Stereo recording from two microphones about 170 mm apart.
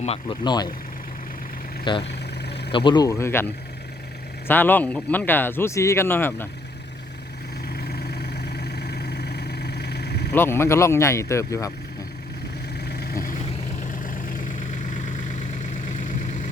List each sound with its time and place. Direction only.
0.0 s speech: 35° left (ahead or behind)
0.4 s speech: 25° left (ahead or behind)
2.0 s vehicle: 75° left (ahead or behind)
2.7 s speech: 25° left (ahead or behind)
7.8 s vehicle: 65° left (ahead or behind)
10.3 s speech: 15° left (ahead or behind)
12.9 s vehicle: 70° left (ahead or behind)
14.0 s vehicle: 55° left (ahead or behind)